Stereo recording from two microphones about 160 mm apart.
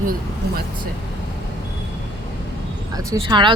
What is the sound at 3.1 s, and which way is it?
Speech, 30° right (ahead or behind).